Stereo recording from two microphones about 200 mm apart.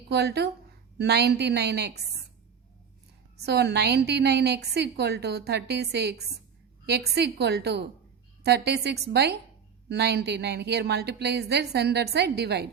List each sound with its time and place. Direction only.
0.1 s a woman's voice: 55° right (ahead or behind)
3.3 s a woman's voice: 55° right (ahead or behind)